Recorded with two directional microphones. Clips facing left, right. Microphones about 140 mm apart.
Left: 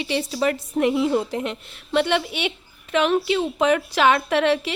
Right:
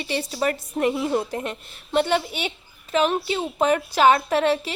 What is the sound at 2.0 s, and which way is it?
A woman's voice, 40° right (ahead or behind).